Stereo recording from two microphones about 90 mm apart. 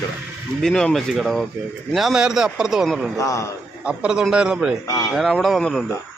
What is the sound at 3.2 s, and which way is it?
Speech, 40° left (ahead or behind).